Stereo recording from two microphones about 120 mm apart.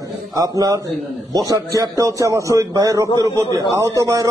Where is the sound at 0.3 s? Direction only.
30° right (ahead or behind).